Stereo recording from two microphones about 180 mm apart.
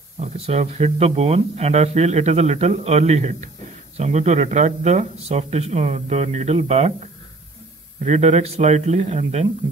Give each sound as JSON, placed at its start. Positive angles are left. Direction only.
{"t": 0.2, "sound": "speech", "side_deg": -35}
{"t": 8.0, "sound": "speech", "side_deg": -40}